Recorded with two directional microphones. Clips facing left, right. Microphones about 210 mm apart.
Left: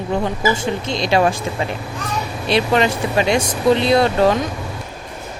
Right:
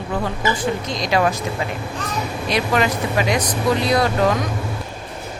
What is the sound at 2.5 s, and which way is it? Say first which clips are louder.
Speech: left 4 dB; 25° left (ahead or behind).